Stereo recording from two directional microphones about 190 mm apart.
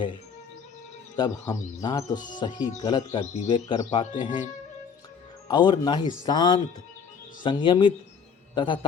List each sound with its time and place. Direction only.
1.1 s speech: 25° left (ahead or behind)
3.1 s speech: 35° left (ahead or behind)
5.5 s speech: 25° left (ahead or behind)